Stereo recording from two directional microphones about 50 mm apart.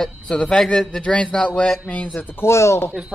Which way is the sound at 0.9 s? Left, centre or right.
Left.